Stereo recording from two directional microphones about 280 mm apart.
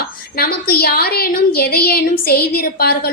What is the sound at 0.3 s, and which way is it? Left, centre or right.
A woman's voice, left.